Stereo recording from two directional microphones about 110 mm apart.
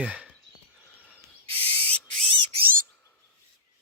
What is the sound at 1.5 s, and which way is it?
Owl, 60° right (ahead or behind).